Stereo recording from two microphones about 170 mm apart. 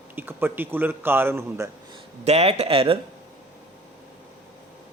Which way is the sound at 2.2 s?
40° right (ahead or behind).